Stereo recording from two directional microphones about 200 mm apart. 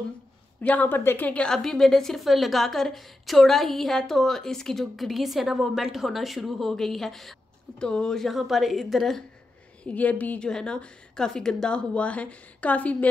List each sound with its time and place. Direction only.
0.6 s a woman's voice: 10° left (ahead or behind)